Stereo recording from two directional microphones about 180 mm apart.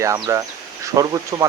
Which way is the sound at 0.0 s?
15° right (ahead or behind).